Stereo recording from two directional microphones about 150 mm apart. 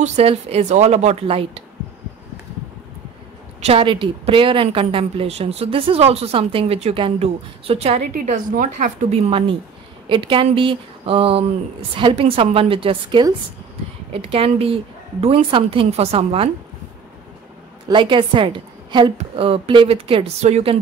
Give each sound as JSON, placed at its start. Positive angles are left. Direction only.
{"t": 0.0, "sound": "speech", "side_deg": -45}
{"t": 3.6, "sound": "a woman's voice", "side_deg": -35}
{"t": 8.1, "sound": "a woman's voice", "side_deg": -60}
{"t": 17.8, "sound": "a woman's voice", "side_deg": -30}